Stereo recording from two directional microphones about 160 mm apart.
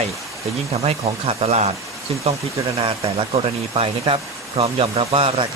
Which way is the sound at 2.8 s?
40° right (ahead or behind).